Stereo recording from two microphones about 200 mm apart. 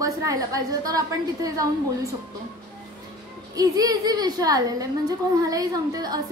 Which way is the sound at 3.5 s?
20° right (ahead or behind).